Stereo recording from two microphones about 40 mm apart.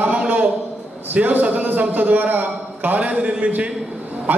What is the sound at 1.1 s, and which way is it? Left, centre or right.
A man's voice, right.